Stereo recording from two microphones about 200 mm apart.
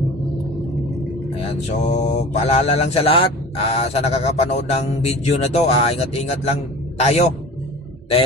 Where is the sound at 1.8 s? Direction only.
35° left (ahead or behind).